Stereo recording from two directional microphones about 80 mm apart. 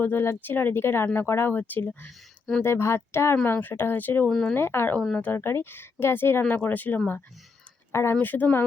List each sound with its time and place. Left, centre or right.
0.0 s speech: left
4.3 s speech: centre
4.5 s speech: left
4.9 s speech: centre
5.3 s speech: left
8.1 s speech: left